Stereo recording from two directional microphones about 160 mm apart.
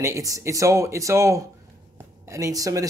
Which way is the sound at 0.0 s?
20° right (ahead or behind).